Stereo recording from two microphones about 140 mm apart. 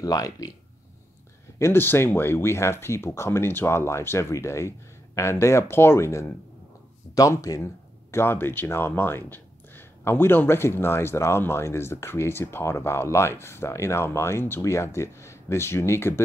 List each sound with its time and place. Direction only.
0.0 s speech: 25° left (ahead or behind)
1.6 s speech: 15° left (ahead or behind)